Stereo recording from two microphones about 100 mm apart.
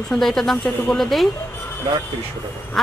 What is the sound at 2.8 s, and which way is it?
Quack, centre (ahead or behind).